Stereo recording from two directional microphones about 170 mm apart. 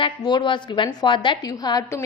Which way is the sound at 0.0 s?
30° left (ahead or behind).